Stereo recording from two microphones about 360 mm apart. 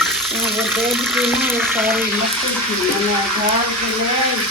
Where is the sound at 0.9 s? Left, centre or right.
Centre.